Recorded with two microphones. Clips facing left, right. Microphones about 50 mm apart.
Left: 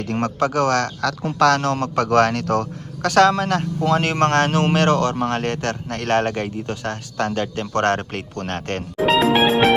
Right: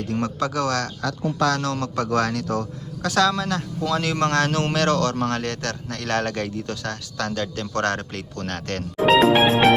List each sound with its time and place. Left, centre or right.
0.0 s speech: left
1.6 s speech: left
2.0 s speech: left
9.0 s music: centre